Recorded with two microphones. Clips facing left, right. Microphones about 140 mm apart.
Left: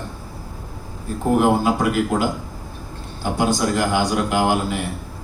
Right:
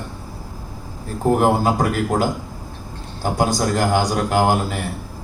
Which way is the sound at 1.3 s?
40° right (ahead or behind).